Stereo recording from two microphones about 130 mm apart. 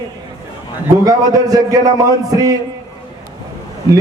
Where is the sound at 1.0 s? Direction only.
25° right (ahead or behind).